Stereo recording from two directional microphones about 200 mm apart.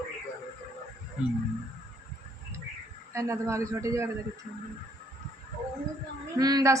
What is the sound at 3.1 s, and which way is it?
A woman's voice, 15° right (ahead or behind).